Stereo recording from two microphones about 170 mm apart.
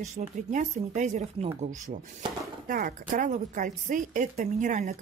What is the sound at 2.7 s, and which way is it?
A woman's voice, 55° right (ahead or behind).